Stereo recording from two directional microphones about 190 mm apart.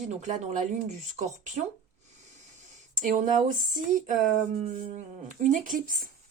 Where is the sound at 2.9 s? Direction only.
45° right (ahead or behind).